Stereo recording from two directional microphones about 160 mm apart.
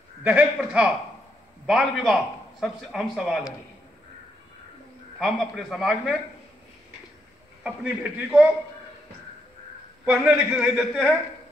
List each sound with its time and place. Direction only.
0.2 s a man's voice: 10° right (ahead or behind)
5.2 s a man's voice: centre (ahead or behind)
7.6 s a man's voice: 5° right (ahead or behind)
10.0 s a man's voice: 10° right (ahead or behind)
10.7 s a man's voice: centre (ahead or behind)